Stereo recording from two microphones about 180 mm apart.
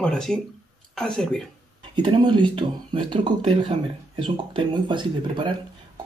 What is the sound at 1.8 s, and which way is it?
Speech, 25° right (ahead or behind).